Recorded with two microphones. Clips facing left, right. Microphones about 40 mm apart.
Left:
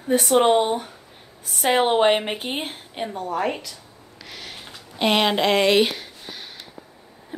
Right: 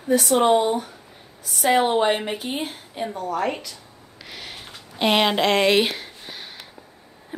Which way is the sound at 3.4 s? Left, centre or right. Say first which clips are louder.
Left 1 dB; centre.